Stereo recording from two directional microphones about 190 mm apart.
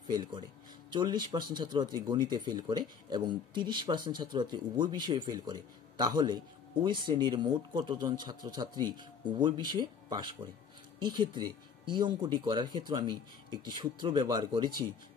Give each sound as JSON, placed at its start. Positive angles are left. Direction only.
{"t": 0.0, "sound": "speech", "side_deg": -20}